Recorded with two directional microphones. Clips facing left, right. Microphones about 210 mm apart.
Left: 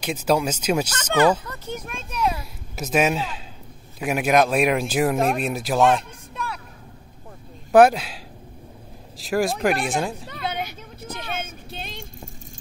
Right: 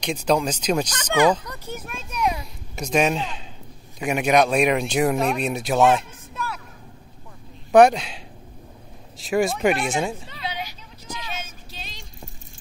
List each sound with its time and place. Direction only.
0.0 s speech: 5° left (ahead or behind)
0.9 s speech: 10° right (ahead or behind)
1.4 s a sound: 10° right (ahead or behind)
2.7 s speech: 5° left (ahead or behind)
5.4 s a sound: centre (ahead or behind)
7.7 s speech: 5° left (ahead or behind)
9.2 s speech: centre (ahead or behind)
10.3 s vehicle: 50° left (ahead or behind)